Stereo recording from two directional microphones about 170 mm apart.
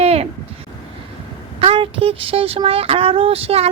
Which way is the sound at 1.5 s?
30° right (ahead or behind).